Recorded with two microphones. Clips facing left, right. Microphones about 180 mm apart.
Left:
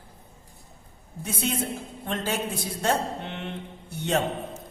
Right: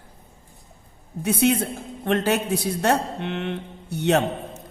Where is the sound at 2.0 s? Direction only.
70° right (ahead or behind).